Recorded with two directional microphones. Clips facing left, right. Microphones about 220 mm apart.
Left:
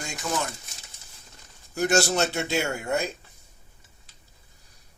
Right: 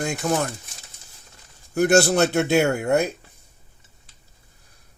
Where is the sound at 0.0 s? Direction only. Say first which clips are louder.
Right 11 dB; 60° right (ahead or behind).